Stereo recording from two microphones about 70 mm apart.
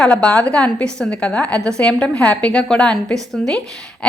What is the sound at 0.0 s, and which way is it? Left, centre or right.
A woman's voice, centre.